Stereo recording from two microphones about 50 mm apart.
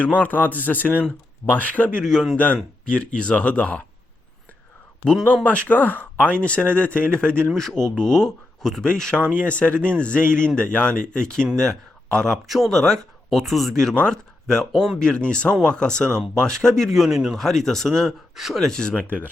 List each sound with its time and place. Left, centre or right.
0.2 s speech: left
5.4 s speech: left
7.5 s speech: centre
12.5 s speech: centre
12.8 s speech: centre
13.4 s speech: centre
14.9 s speech: centre
16.9 s speech: centre
17.3 s speech: centre
18.3 s speech: centre
18.6 s speech: centre